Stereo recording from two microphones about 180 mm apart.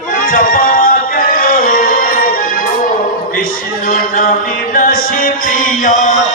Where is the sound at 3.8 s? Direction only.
55° left (ahead or behind).